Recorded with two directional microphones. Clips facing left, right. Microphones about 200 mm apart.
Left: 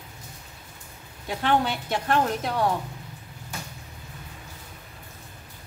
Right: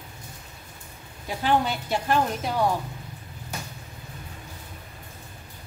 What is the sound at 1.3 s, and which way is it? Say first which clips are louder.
A woman's voice: even; 5° right (ahead or behind).